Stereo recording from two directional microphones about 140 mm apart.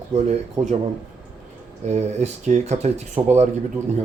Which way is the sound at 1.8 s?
55° right (ahead or behind).